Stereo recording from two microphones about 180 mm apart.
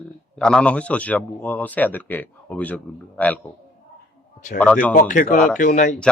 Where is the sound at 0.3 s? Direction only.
5° left (ahead or behind).